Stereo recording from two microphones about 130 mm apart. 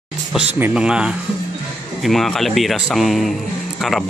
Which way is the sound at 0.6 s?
5° right (ahead or behind).